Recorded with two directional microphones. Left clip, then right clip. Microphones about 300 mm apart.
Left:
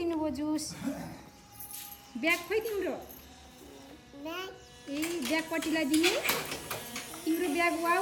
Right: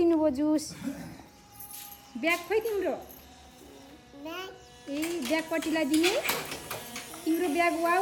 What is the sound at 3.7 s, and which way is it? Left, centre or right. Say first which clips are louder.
Music: even; centre.